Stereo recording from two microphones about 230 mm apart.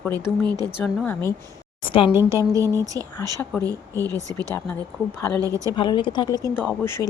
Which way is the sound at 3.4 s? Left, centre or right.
Centre.